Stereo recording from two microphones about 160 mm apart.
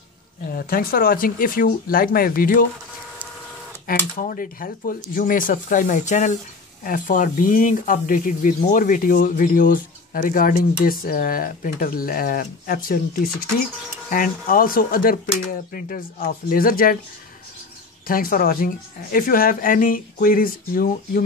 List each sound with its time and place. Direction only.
0.5 s speech: 65° left (ahead or behind)
3.8 s speech: 60° left (ahead or behind)
18.0 s speech: 65° left (ahead or behind)